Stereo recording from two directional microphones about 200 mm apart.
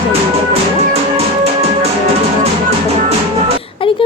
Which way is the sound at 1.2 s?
30° right (ahead or behind).